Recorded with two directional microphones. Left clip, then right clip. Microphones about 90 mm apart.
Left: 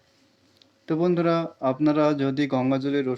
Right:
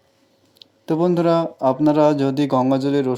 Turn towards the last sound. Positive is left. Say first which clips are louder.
# right 6 dB
turn(degrees=-35)  # may be behind; listen again after turning